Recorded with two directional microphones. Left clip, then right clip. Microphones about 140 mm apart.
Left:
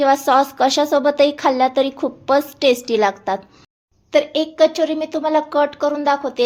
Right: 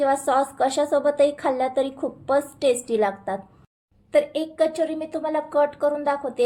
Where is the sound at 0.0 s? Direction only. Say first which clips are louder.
Left 6 dB; 30° left (ahead or behind).